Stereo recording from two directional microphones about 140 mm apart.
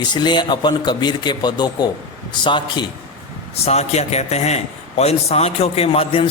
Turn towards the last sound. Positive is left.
turn(degrees=45)  # may be behind; listen again after turning